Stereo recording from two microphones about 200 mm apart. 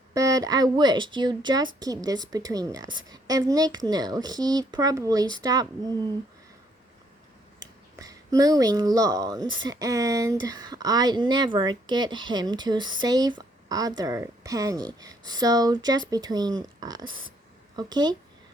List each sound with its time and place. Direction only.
0.1 s speech: 15° right (ahead or behind)
7.6 s speech: 20° right (ahead or behind)